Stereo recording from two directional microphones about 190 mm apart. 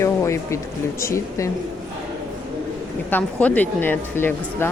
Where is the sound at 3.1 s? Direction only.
10° left (ahead or behind).